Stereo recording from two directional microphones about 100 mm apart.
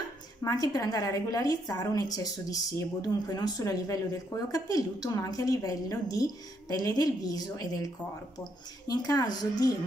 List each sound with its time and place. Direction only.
0.4 s a woman's voice: 35° left (ahead or behind)